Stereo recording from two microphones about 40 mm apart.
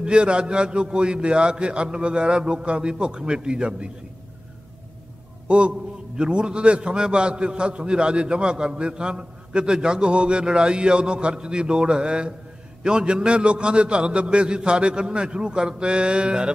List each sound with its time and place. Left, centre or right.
0.0 s a man's voice: right
5.5 s a man's voice: right